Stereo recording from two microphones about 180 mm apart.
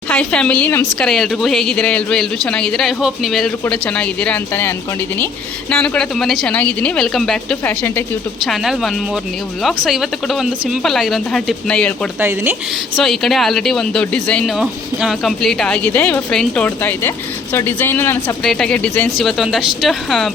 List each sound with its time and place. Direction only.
0.1 s speech: 5° left (ahead or behind)
5.7 s speech: 5° left (ahead or behind)
13.0 s speech: centre (ahead or behind)